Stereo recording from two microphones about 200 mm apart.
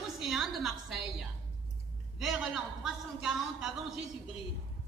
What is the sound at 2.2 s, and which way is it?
A woman's voice, centre (ahead or behind).